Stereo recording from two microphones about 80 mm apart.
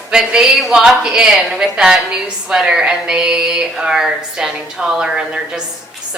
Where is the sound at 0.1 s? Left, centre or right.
Centre.